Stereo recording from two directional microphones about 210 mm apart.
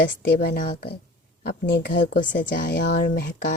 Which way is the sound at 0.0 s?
50° left (ahead or behind).